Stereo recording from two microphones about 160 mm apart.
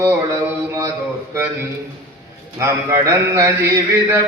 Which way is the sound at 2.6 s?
20° right (ahead or behind).